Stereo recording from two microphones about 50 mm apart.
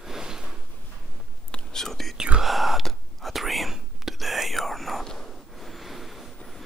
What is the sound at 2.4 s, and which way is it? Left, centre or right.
Whispering, centre.